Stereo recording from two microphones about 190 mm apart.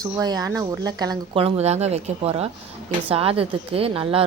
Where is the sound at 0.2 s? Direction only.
20° right (ahead or behind).